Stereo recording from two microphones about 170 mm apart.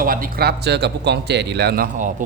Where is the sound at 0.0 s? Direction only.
55° right (ahead or behind).